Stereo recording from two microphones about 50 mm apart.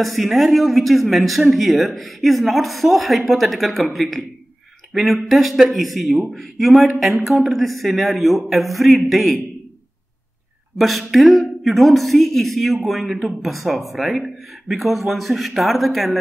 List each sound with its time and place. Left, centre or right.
0.0 s speech: centre
10.8 s speech: centre